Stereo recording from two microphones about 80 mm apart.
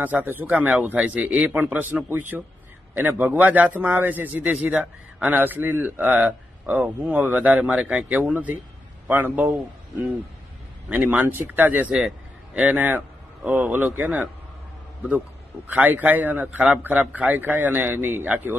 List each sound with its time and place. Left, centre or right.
0.0 s a man's voice: right
10.9 s a man's voice: right